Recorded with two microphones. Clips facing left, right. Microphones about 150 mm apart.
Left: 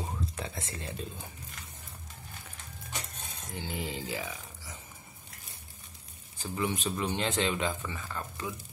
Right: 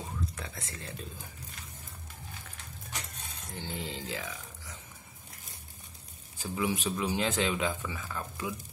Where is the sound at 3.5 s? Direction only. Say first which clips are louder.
Left 2 dB; 10° left (ahead or behind).